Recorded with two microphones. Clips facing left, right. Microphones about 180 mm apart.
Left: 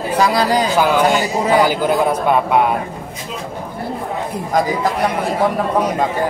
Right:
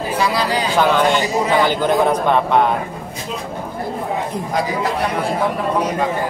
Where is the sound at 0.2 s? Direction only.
45° left (ahead or behind).